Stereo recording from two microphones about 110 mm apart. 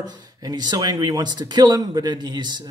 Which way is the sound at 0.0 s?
40° right (ahead or behind).